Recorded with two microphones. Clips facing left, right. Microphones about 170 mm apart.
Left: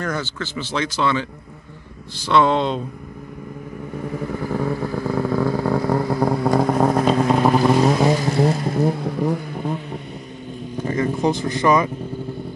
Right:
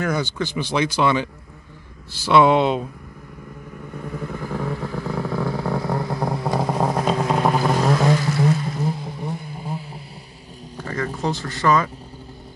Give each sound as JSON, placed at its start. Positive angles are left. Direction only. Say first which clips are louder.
{"t": 0.0, "sound": "speech", "louder": "right 3 dB", "side_deg": -15}
{"t": 4.2, "sound": "vehicle", "louder": "left 4 dB", "side_deg": 5}
{"t": 7.8, "sound": "vehicle", "louder": "left 2 dB", "side_deg": 20}
{"t": 8.4, "sound": "vehicle", "louder": "left 2 dB", "side_deg": 35}
{"t": 8.7, "sound": "vehicle", "louder": "left 7 dB", "side_deg": 60}
{"t": 10.9, "sound": "speech", "louder": "left 5 dB", "side_deg": 15}